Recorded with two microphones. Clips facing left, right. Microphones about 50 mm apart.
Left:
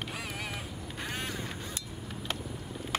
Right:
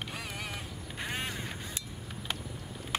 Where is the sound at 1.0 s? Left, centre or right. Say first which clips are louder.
Right 1 dB; centre.